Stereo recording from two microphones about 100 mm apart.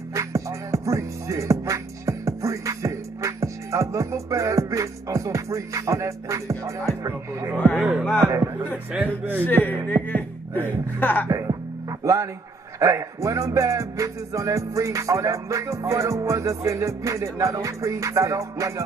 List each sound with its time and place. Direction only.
0.1 s music: 30° right (ahead or behind)
7.5 s a man's voice: 10° left (ahead or behind)
8.9 s a man's voice: 15° right (ahead or behind)
9.7 s music: 20° left (ahead or behind)
11.0 s speech: 15° left (ahead or behind)
11.2 s music: 35° right (ahead or behind)
12.0 s speech: 30° right (ahead or behind)
12.7 s music: 30° right (ahead or behind)